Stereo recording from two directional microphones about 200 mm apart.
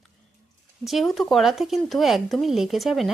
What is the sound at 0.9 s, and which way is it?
Speech, centre (ahead or behind).